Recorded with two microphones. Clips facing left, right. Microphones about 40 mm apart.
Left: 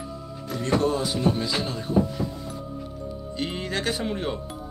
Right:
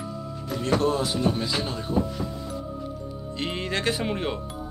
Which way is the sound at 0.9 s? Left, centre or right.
Centre.